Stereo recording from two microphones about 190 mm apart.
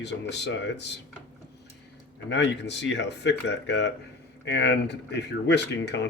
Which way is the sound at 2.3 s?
65° left (ahead or behind).